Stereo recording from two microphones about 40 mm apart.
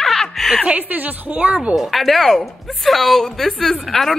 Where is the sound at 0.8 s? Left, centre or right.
Right.